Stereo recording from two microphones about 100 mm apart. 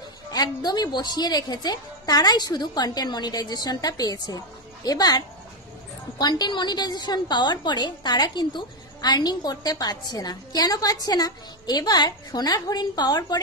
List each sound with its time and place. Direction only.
0.3 s a woman's voice: 40° left (ahead or behind)